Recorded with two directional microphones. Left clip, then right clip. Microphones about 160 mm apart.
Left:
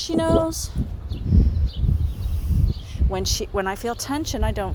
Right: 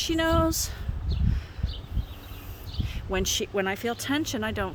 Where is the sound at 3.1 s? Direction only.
10° right (ahead or behind).